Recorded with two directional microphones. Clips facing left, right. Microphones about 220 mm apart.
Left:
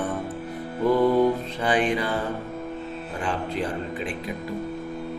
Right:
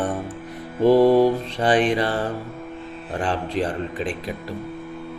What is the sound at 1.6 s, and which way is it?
Music, 40° right (ahead or behind).